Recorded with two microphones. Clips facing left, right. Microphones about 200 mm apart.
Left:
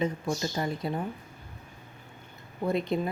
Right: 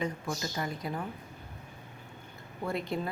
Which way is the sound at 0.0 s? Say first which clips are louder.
Left 5 dB; 25° left (ahead or behind).